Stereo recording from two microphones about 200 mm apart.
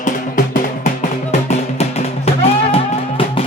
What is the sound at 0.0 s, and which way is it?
Music, 40° left (ahead or behind).